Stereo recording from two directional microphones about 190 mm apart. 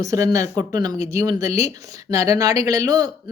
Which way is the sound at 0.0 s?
15° right (ahead or behind).